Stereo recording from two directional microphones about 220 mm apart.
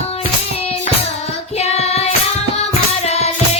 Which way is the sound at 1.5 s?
30° left (ahead or behind).